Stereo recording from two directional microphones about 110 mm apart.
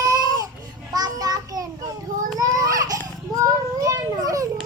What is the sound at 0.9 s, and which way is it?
Child singing, 35° right (ahead or behind).